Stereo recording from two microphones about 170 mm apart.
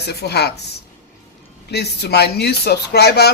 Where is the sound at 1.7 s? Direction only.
75° left (ahead or behind).